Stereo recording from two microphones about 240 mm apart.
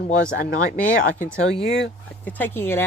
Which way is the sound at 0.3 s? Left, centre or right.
Left.